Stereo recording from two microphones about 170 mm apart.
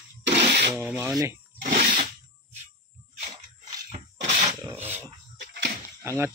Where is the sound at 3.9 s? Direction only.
40° right (ahead or behind).